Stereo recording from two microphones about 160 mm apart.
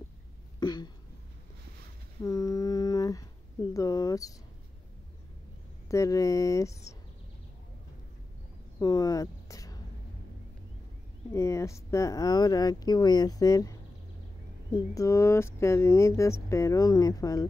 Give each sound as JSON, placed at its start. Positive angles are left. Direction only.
{"t": 0.6, "sound": "throat clearing", "side_deg": 25}
{"t": 2.2, "sound": "humming", "side_deg": 20}
{"t": 3.7, "sound": "speech", "side_deg": 20}
{"t": 5.9, "sound": "speech", "side_deg": 20}
{"t": 8.7, "sound": "speech", "side_deg": 20}
{"t": 11.3, "sound": "speech", "side_deg": 20}